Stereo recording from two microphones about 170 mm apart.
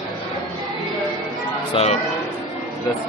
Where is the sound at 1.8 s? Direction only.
35° left (ahead or behind).